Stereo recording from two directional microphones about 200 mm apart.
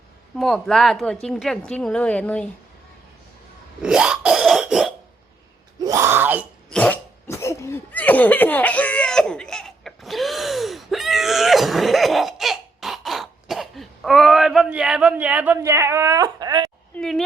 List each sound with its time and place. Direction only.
0.3 s a woman's voice: centre (ahead or behind)
3.8 s cough: 5° right (ahead or behind)
5.8 s groan: 15° right (ahead or behind)
6.7 s cough: 5° left (ahead or behind); by 16.7 s 20° right (ahead or behind)
16.9 s a woman's voice: centre (ahead or behind)